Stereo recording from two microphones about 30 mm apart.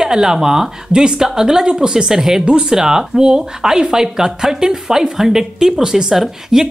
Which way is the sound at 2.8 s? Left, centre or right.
Centre.